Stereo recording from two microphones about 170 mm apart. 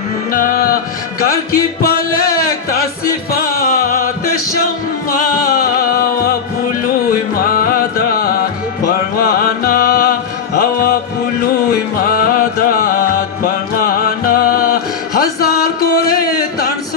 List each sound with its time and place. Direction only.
0.3 s music: 55° left (ahead or behind)
3.5 s music: 50° left (ahead or behind)
5.1 s music: 55° left (ahead or behind)
12.0 s music: 55° left (ahead or behind)